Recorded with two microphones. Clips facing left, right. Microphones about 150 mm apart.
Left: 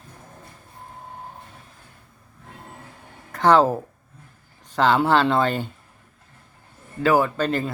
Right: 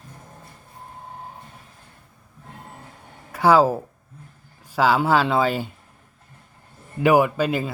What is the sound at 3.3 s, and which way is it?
Speech, 5° right (ahead or behind).